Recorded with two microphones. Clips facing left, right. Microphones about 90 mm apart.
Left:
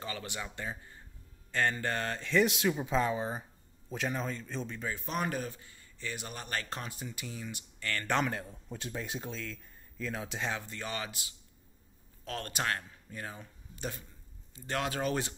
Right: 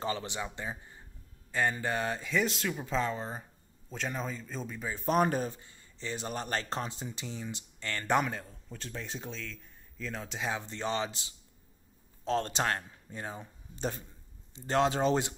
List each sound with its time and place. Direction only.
0.0 s speech: 25° right (ahead or behind)
2.4 s speech: 15° left (ahead or behind); by 4.9 s 10° right (ahead or behind)
4.9 s speech: 35° right (ahead or behind); by 8.3 s 15° right (ahead or behind)
8.6 s speech: 15° left (ahead or behind)
10.4 s speech: 20° right (ahead or behind)